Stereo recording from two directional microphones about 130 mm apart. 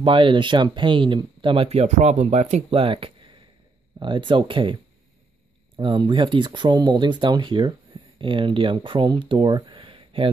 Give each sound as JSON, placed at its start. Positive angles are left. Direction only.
{"t": 0.0, "sound": "speech", "side_deg": -40}
{"t": 5.8, "sound": "speech", "side_deg": -40}